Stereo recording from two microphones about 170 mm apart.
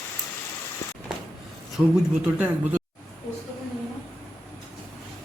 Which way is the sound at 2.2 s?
10° right (ahead or behind).